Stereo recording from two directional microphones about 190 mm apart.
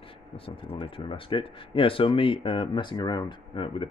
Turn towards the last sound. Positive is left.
turn(degrees=30)  # may be behind; listen again after turning